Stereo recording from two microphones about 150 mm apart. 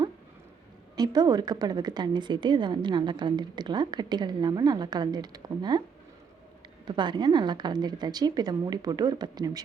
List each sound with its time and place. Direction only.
0.9 s a woman's voice: 25° right (ahead or behind)
6.8 s a woman's voice: 30° right (ahead or behind)